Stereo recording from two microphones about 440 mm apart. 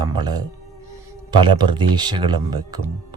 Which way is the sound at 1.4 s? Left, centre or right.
Centre.